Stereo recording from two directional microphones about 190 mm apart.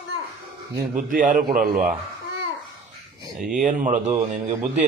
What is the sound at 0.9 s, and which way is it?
A man's voice, 45° right (ahead or behind).